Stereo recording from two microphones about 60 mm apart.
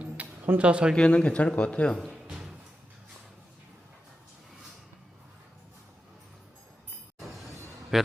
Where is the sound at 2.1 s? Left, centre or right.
Centre.